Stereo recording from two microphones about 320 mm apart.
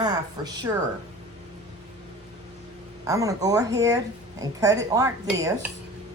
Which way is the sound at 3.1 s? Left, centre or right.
Centre.